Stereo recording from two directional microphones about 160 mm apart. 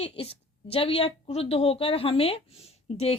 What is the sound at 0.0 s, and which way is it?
A woman's voice, 35° left (ahead or behind).